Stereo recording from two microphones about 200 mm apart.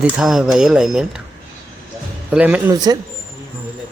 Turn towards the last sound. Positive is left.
turn(degrees=-20)  # may be behind; listen again after turning